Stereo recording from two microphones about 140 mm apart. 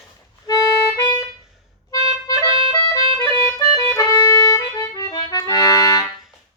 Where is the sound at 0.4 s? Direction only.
25° left (ahead or behind).